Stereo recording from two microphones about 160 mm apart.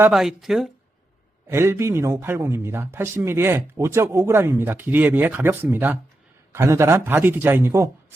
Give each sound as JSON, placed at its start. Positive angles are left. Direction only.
{"t": 0.1, "sound": "speech", "side_deg": 0}
{"t": 1.5, "sound": "speech", "side_deg": -15}